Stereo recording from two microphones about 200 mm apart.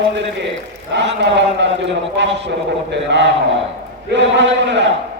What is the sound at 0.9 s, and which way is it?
Speech, 60° right (ahead or behind).